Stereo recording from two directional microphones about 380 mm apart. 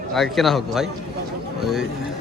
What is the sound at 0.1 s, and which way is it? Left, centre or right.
Speech, centre.